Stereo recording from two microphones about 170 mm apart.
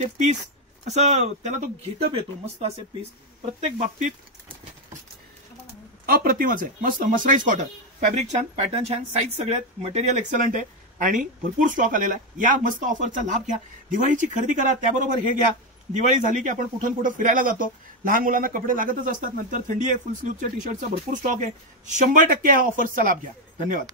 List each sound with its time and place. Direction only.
0.0 s speech: 40° right (ahead or behind)
6.0 s speech: 60° right (ahead or behind)